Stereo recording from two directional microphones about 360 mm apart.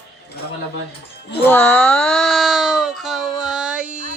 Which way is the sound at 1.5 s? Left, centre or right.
Centre.